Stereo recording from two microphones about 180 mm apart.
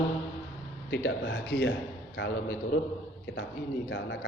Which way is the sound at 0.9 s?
75° left (ahead or behind).